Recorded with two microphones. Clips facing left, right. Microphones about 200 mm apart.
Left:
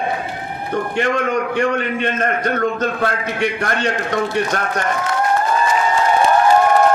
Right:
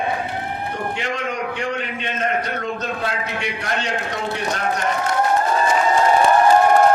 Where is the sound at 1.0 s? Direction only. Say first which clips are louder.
Left 10 dB; 55° left (ahead or behind).